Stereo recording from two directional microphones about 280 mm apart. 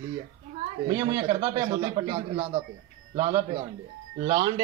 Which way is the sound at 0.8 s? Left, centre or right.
Centre.